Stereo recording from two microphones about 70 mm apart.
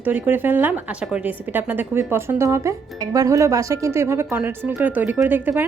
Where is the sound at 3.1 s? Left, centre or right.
Right.